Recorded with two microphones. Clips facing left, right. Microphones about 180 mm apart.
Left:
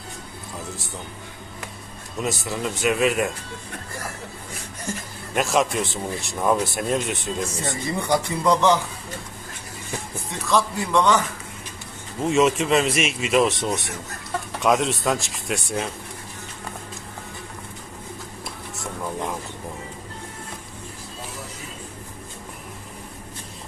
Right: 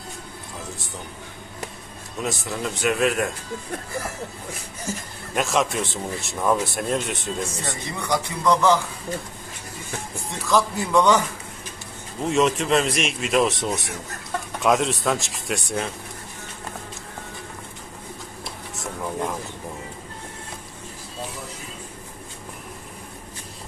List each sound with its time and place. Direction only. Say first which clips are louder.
2.2 s speech: left 1 dB; centre (ahead or behind)
4.9 s speech: even; centre (ahead or behind)
8.0 s speech: left 1 dB; 30° left (ahead or behind)
10.3 s speech: right 1 dB; centre (ahead or behind)
12.2 s speech: left 2 dB; centre (ahead or behind)
18.8 s a sound: right 1 dB; centre (ahead or behind)